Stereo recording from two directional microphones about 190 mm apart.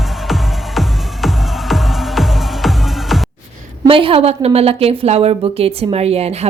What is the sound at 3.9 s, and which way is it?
A woman's voice, 30° right (ahead or behind).